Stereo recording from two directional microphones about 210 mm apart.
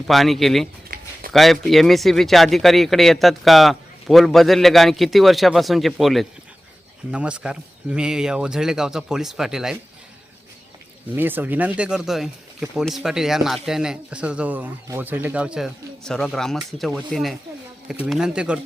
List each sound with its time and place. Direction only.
0.1 s speech: centre (ahead or behind)
11.1 s speech: 10° right (ahead or behind)